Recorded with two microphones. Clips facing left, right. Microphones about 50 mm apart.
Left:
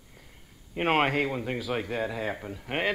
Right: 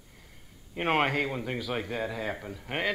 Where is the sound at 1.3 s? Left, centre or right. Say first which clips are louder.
Left 2 dB; centre.